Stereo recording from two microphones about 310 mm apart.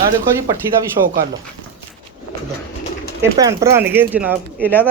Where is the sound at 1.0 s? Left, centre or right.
Right.